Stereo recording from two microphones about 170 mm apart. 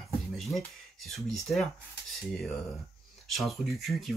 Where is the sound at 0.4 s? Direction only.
Centre (ahead or behind).